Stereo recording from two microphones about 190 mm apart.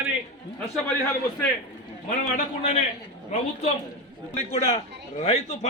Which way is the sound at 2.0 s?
40° left (ahead or behind).